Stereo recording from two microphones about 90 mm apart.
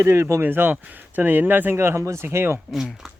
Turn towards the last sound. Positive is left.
turn(degrees=0)  # may be behind; listen again after turning